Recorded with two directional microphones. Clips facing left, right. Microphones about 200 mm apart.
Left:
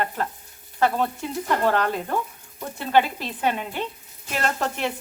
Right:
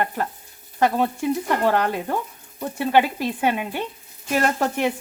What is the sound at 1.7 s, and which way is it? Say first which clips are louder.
Speech: right 3 dB; 15° right (ahead or behind).